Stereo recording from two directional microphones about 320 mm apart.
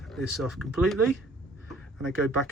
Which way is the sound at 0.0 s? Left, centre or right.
Centre.